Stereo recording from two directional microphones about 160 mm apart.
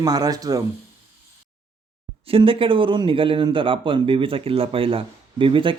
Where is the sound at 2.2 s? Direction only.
35° right (ahead or behind).